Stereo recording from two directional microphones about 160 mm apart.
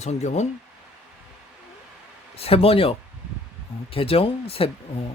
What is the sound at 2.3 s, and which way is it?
Speech, 35° left (ahead or behind).